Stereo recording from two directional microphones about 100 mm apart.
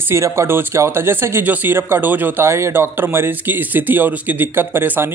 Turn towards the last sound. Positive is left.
turn(degrees=-20)  # may be behind; listen again after turning